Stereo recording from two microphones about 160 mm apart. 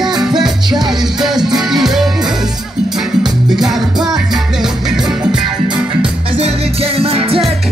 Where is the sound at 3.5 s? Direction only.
5° right (ahead or behind).